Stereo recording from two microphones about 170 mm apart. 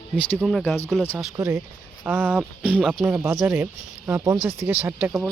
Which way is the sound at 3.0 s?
15° right (ahead or behind).